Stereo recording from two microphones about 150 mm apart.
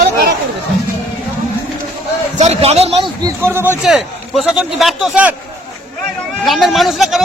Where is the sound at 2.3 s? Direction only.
45° right (ahead or behind).